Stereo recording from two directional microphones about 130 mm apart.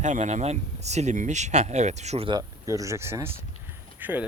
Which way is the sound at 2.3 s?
30° right (ahead or behind).